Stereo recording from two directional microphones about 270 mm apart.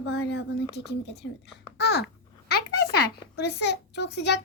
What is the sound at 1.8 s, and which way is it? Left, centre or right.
Babbling, left.